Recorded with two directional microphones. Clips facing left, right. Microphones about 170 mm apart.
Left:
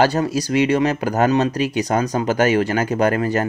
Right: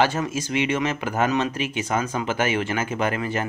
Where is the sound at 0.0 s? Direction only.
35° left (ahead or behind).